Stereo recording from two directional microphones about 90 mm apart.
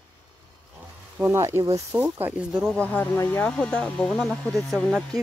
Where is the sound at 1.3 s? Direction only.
35° right (ahead or behind).